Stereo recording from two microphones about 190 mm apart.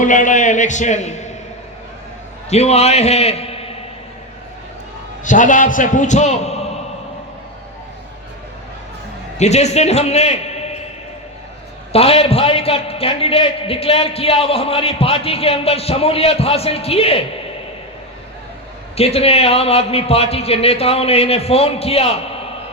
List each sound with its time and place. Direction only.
0.0 s a man's voice: 40° left (ahead or behind)
2.5 s a man's voice: 35° left (ahead or behind)
5.2 s a man's voice: 40° left (ahead or behind)
9.4 s a man's voice: 35° left (ahead or behind)
11.9 s a man's voice: 30° left (ahead or behind)
18.9 s a man's voice: 30° left (ahead or behind)